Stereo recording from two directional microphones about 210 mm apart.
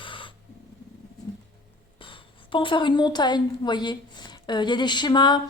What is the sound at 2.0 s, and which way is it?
A woman's voice, 25° left (ahead or behind).